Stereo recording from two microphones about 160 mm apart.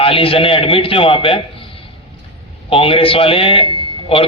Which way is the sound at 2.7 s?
35° left (ahead or behind).